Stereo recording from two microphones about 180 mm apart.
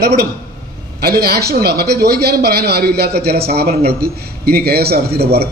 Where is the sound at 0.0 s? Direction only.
60° right (ahead or behind).